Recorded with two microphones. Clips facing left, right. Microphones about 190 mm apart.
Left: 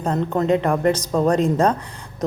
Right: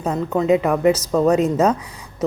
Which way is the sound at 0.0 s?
5° right (ahead or behind).